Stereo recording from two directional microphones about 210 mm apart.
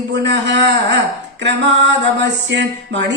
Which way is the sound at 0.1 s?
55° right (ahead or behind).